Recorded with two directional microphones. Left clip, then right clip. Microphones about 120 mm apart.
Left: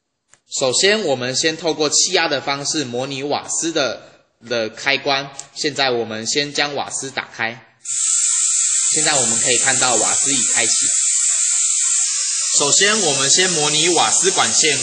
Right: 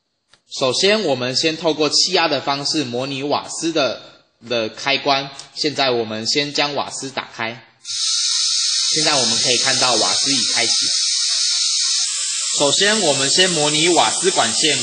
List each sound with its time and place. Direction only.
0.5 s speech: 50° right (ahead or behind)
7.9 s snake: centre (ahead or behind)
9.2 s speech: centre (ahead or behind)
9.7 s speech: 60° right (ahead or behind)
9.9 s speech: centre (ahead or behind)
10.7 s music: centre (ahead or behind)
12.5 s speech: 55° right (ahead or behind)